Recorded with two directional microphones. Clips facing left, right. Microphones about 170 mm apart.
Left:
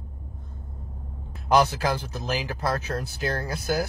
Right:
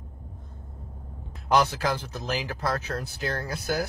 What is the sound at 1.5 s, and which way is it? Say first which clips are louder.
Speech: left 2 dB; 5° left (ahead or behind).